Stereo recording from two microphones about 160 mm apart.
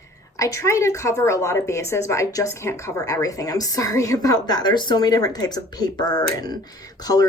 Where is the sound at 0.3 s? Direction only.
20° left (ahead or behind).